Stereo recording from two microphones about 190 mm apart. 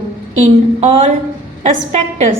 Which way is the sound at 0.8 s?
35° right (ahead or behind).